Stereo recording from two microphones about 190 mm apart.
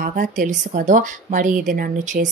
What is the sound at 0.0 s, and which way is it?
Speech, 45° right (ahead or behind).